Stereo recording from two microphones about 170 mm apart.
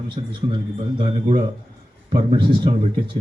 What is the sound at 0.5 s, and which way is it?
Speech, 30° right (ahead or behind).